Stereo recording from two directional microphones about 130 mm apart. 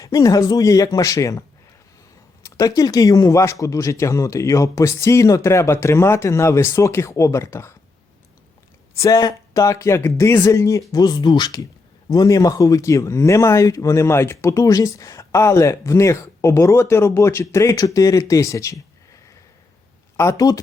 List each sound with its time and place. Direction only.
0.0 s speech: 25° left (ahead or behind)
9.0 s speech: 25° left (ahead or behind)
20.1 s speech: 25° left (ahead or behind)